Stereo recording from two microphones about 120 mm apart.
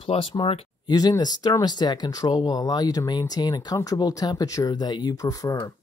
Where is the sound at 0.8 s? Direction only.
35° left (ahead or behind).